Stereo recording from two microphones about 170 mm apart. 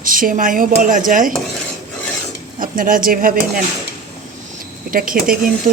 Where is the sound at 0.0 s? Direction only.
55° right (ahead or behind).